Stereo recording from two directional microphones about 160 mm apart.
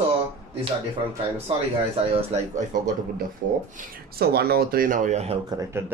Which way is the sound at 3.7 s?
65° right (ahead or behind).